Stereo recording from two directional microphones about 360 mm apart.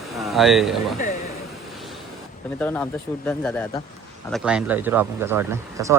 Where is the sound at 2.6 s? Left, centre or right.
Centre.